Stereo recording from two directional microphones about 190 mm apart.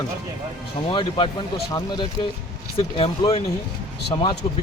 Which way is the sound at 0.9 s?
25° left (ahead or behind).